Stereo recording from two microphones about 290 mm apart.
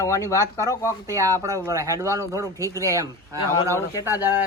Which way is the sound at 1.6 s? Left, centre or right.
Centre.